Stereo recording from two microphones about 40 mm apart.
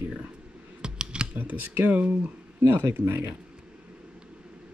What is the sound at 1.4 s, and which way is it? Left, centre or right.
Speech, right.